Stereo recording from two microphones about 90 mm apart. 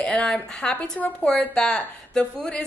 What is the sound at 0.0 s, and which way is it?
Speech, 10° left (ahead or behind).